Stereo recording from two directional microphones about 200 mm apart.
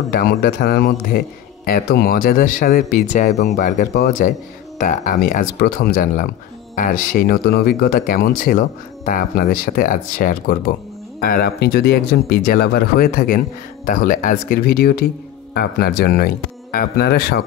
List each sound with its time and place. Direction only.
0.1 s speech: 50° left (ahead or behind)